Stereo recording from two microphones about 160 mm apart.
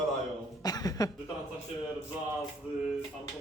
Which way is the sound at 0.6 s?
25° left (ahead or behind).